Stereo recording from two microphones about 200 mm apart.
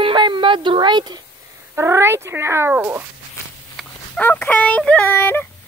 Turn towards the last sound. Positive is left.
turn(degrees=10)  # may be behind; listen again after turning